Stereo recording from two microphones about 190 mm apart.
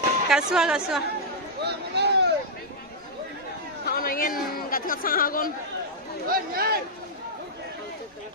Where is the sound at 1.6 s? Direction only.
60° right (ahead or behind).